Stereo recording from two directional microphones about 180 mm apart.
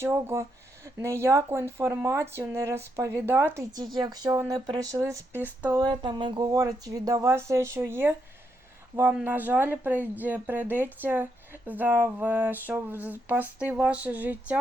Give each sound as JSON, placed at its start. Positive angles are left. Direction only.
{"t": 0.0, "sound": "speech", "side_deg": -15}
{"t": 5.8, "sound": "speech", "side_deg": -25}